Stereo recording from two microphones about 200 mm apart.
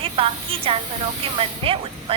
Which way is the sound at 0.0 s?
25° right (ahead or behind).